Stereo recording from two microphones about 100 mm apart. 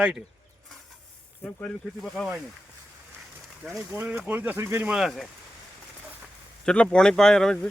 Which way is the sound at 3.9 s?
15° right (ahead or behind).